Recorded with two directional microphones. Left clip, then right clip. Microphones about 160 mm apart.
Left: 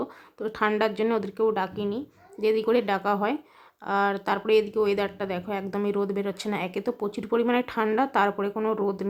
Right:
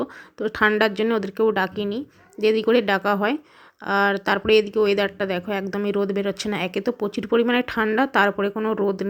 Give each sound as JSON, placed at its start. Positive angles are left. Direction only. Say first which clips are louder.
{"t": 0.0, "sound": "a woman's voice", "louder": "right 5 dB", "side_deg": -25}